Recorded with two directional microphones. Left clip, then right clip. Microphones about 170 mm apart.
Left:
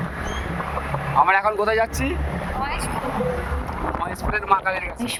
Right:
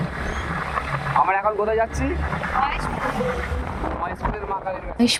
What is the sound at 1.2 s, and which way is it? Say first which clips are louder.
Speech: left 2 dB; 85° left.